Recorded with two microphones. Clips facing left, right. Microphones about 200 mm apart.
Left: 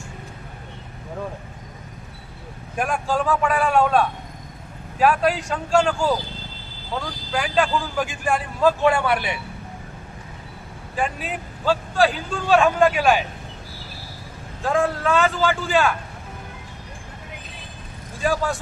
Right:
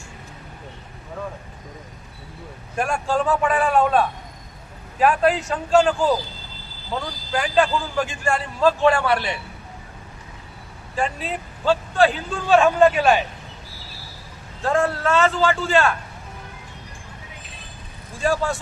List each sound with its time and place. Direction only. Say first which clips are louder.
2.7 s a man's voice: right 1 dB; centre (ahead or behind)
7.3 s a man's voice: right 2 dB; centre (ahead or behind)
8.6 s a man's voice: right 1 dB; 15° left (ahead or behind)
10.9 s speech: right 1 dB; 10° left (ahead or behind)
14.6 s a man's voice: right 1 dB; centre (ahead or behind)
18.2 s a man's voice: right 1 dB; centre (ahead or behind)